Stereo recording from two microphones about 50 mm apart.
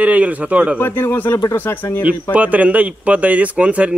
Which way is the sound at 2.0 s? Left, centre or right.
Right.